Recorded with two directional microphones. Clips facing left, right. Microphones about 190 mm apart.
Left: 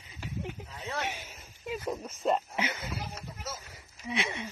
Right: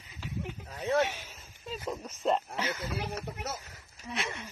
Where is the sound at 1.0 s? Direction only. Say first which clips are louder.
Right 2 dB; 15° left (ahead or behind).